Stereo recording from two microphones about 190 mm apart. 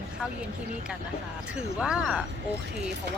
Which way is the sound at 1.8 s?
5° right (ahead or behind).